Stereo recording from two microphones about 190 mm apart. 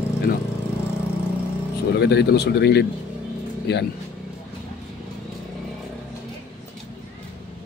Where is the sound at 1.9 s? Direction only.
60° left (ahead or behind).